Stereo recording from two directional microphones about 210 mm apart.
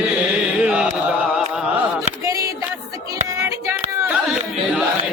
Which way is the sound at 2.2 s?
15° right (ahead or behind).